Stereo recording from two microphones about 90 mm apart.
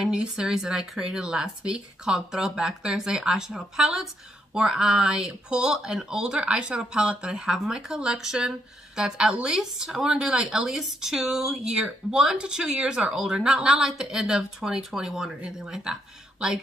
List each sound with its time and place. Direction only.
0.0 s speech: 10° right (ahead or behind)